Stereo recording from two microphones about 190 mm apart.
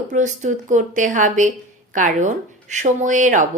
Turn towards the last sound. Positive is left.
turn(degrees=-40)  # may be behind; listen again after turning